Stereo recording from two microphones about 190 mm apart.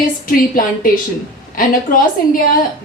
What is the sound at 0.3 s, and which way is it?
Speech, 45° left (ahead or behind).